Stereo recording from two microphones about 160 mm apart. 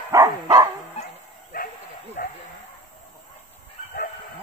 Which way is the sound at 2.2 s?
60° left (ahead or behind).